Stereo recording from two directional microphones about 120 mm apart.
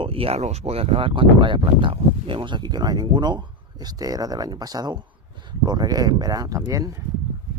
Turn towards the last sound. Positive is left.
turn(degrees=-30)  # may be behind; listen again after turning